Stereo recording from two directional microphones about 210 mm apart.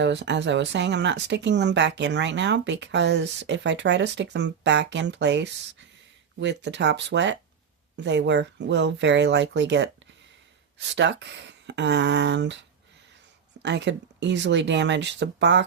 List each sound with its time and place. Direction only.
0.0 s speech: 55° right (ahead or behind)